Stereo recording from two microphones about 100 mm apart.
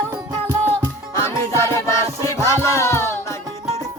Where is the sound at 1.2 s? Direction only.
30° left (ahead or behind).